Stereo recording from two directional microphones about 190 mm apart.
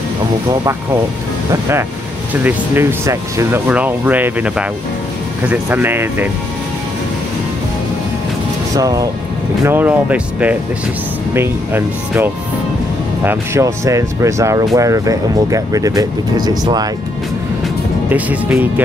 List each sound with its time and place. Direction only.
1.5 s speech: 15° right (ahead or behind)
8.7 s speech: 20° right (ahead or behind)
18.1 s speech: 10° right (ahead or behind)